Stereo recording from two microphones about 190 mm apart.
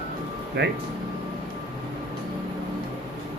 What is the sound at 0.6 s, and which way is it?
Speech, 65° right (ahead or behind).